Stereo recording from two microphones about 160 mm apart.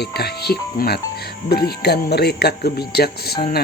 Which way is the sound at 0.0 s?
85° left.